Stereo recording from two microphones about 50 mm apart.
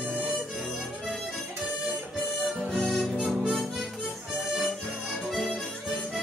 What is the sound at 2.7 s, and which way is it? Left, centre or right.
Music, centre.